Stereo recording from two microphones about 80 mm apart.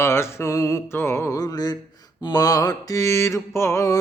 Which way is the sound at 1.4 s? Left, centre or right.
Left.